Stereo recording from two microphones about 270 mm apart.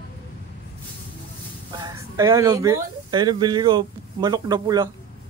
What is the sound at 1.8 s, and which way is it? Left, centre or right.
Speech, centre.